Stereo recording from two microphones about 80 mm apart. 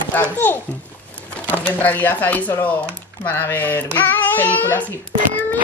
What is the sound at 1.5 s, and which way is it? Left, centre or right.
Speech, left.